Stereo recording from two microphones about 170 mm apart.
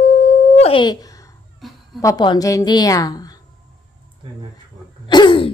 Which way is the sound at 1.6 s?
Centre (ahead or behind).